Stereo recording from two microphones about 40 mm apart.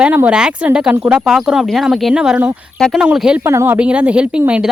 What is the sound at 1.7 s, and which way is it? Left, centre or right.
A woman's voice, centre.